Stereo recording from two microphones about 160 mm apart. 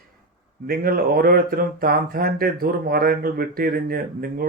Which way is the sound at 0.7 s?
70° right (ahead or behind).